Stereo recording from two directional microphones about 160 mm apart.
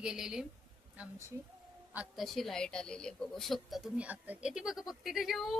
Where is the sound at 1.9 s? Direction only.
Centre (ahead or behind).